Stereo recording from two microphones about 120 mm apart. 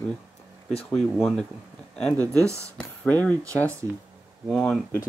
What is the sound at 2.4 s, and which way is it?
Speech, 25° right (ahead or behind).